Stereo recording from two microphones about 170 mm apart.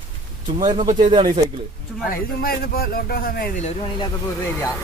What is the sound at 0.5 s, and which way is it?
Speech, 25° right (ahead or behind).